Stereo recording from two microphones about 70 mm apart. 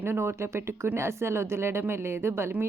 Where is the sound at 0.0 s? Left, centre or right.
Right.